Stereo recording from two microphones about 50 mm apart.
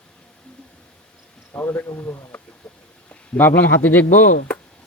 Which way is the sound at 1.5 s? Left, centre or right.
Left.